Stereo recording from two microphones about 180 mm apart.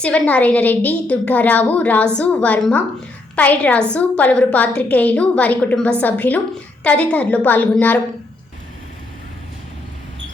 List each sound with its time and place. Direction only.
0.0 s a woman's voice: 5° left (ahead or behind)